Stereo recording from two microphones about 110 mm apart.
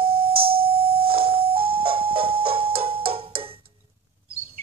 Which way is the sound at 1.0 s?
55° right (ahead or behind).